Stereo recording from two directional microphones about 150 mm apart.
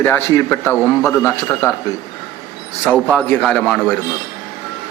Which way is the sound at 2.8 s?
5° left (ahead or behind).